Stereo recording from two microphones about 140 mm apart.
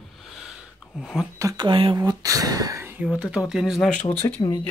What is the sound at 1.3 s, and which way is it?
Speech, 25° right (ahead or behind).